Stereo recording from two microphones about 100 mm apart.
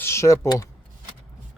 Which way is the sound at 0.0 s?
30° left (ahead or behind).